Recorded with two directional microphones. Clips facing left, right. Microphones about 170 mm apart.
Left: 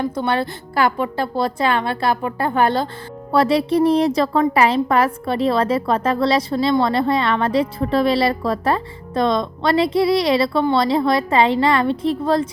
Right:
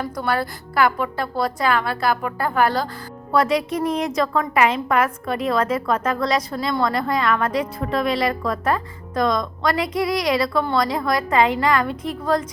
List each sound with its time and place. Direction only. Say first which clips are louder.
0.0 s a woman's voice: left 3 dB; 25° left (ahead or behind)